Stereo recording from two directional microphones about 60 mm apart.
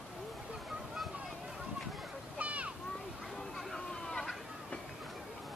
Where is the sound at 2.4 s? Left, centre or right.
Right.